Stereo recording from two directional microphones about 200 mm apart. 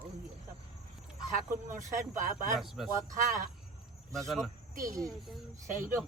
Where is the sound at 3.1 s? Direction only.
40° right (ahead or behind).